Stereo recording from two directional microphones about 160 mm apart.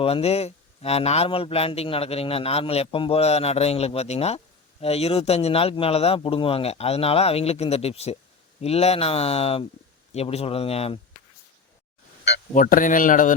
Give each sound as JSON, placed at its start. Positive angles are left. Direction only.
{"t": 0.0, "sound": "a man's voice", "side_deg": 40}
{"t": 12.5, "sound": "speech", "side_deg": 55}